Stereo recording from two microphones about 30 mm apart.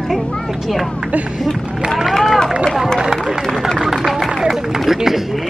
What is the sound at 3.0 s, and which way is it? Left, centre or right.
A man's voice, centre.